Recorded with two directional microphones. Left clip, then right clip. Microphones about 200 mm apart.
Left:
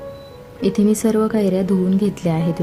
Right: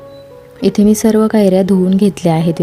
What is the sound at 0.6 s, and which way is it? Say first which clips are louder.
Speech: right 6 dB; 30° right (ahead or behind).